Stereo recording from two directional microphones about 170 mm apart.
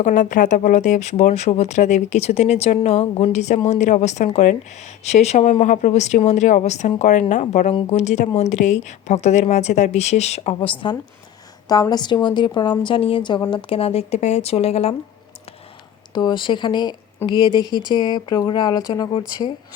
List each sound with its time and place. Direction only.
0.0 s speech: 50° left (ahead or behind)
16.1 s speech: 25° left (ahead or behind)